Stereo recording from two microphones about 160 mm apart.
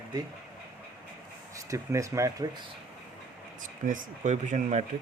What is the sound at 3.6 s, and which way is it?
Speech, 55° right (ahead or behind).